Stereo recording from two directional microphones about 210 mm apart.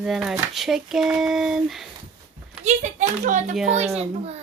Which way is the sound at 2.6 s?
35° right (ahead or behind).